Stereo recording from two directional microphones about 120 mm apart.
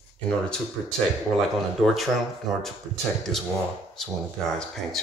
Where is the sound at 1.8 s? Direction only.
Centre (ahead or behind).